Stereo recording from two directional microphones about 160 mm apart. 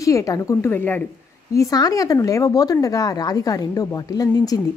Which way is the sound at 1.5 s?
20° left (ahead or behind).